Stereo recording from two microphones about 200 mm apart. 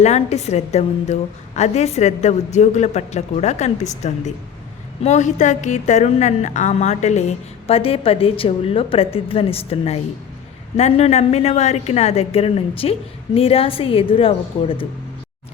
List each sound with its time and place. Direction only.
0.0 s a woman's voice: 35° left (ahead or behind)